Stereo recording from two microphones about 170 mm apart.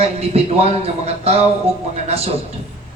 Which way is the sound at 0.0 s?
35° right (ahead or behind).